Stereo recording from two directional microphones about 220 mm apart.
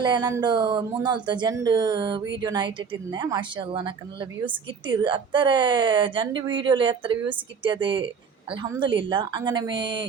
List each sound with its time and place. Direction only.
0.0 s a woman's voice: 20° right (ahead or behind)